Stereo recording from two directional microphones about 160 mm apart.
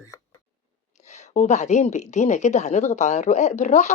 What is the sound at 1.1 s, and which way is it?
Speech, 50° left (ahead or behind).